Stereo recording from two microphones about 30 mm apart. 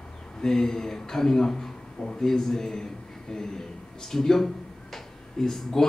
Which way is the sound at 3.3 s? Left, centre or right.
Centre.